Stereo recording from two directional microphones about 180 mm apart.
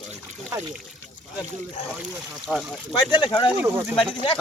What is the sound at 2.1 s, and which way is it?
Speech, 5° right (ahead or behind).